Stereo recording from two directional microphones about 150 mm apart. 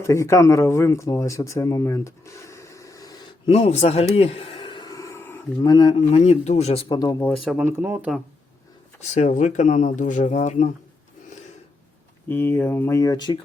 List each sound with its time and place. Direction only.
0.0 s speech: 20° left (ahead or behind)
3.5 s speech: 45° left (ahead or behind)
4.1 s a sound: 40° left (ahead or behind); by 5.7 s 15° left (ahead or behind)
5.7 s speech: 30° left (ahead or behind)
6.1 s speech: 45° left (ahead or behind)
6.9 s speech: 25° left (ahead or behind)
7.6 s speech: 15° right (ahead or behind)
9.1 s speech: 50° left (ahead or behind)
12.3 s speech: 15° left (ahead or behind)